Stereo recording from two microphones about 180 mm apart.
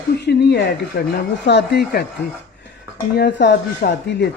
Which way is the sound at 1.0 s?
60° left (ahead or behind).